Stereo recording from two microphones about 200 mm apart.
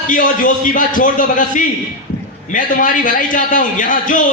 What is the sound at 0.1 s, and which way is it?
A man's voice, 40° left (ahead or behind).